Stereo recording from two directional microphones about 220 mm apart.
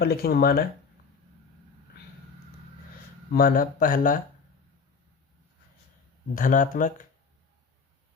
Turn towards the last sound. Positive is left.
turn(degrees=35)  # may be behind; listen again after turning